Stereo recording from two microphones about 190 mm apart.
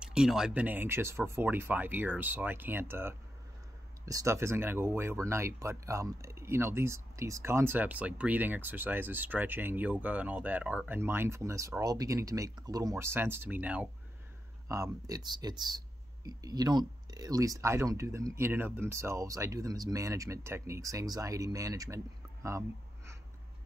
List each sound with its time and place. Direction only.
0.0 s speech: 5° right (ahead or behind)